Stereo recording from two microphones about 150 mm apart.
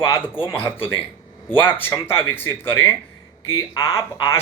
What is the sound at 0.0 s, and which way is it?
Speech, 20° left (ahead or behind).